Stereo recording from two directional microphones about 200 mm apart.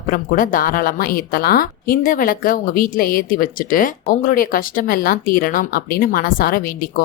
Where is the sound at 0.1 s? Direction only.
40° left (ahead or behind).